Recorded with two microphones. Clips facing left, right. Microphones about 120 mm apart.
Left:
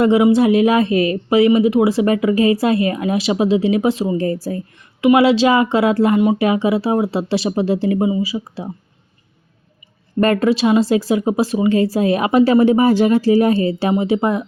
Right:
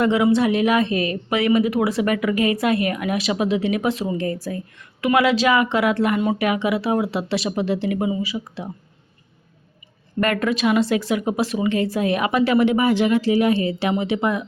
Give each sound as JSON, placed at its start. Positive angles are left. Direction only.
{"t": 0.0, "sound": "speech", "side_deg": 25}
{"t": 10.2, "sound": "speech", "side_deg": 30}